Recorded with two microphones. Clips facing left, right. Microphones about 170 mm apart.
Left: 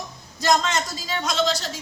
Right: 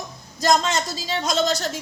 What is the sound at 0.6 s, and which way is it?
A woman's voice, 30° right (ahead or behind).